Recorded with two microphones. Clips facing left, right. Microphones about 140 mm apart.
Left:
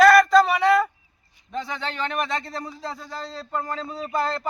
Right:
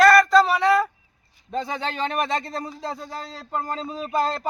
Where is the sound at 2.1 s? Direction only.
30° right (ahead or behind).